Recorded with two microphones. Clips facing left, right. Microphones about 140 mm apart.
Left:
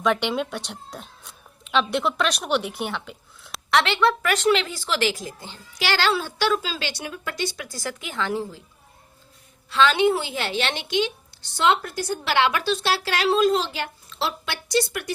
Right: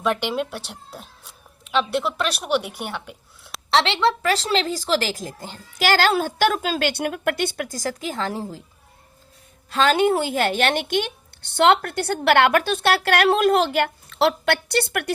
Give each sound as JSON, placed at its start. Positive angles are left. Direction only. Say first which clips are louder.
{"t": 0.0, "sound": "speech", "louder": "even", "side_deg": -10}
{"t": 3.7, "sound": "a woman's voice", "louder": "right 1 dB", "side_deg": -25}
{"t": 9.6, "sound": "a woman's voice", "louder": "right 1 dB", "side_deg": -45}